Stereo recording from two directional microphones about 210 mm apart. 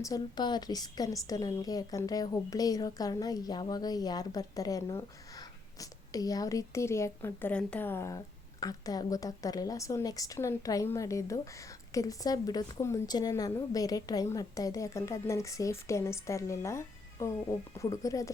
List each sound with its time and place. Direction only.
0.0 s a woman's voice: 20° left (ahead or behind)